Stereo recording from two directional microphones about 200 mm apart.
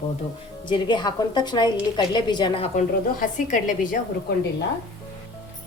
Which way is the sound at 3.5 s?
40° left (ahead or behind).